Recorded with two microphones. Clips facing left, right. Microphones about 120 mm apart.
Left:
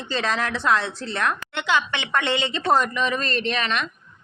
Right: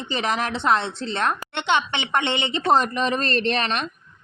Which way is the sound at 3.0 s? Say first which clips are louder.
Right 2 dB; 35° right (ahead or behind).